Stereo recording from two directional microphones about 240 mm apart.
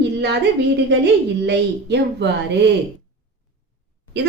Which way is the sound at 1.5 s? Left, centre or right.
Right.